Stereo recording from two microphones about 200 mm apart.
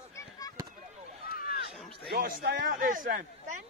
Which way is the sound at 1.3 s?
45° left (ahead or behind).